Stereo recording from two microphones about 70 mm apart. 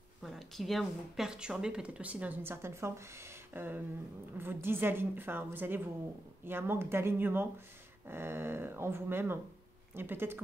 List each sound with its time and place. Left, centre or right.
0.2 s a woman's voice: centre; by 10.4 s right